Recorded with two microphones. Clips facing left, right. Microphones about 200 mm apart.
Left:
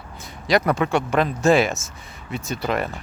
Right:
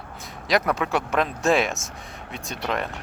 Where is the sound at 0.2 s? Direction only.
Centre (ahead or behind).